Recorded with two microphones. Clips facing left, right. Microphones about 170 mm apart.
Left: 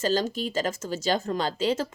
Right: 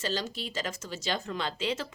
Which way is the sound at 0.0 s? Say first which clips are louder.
Left 8 dB; 45° left (ahead or behind).